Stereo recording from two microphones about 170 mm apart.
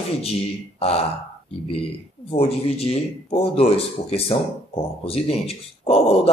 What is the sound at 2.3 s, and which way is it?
Speech, 35° left (ahead or behind).